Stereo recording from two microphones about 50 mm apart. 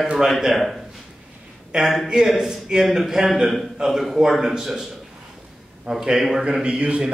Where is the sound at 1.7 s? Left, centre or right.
Centre.